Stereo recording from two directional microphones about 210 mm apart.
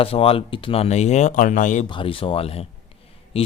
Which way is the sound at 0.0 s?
25° left (ahead or behind).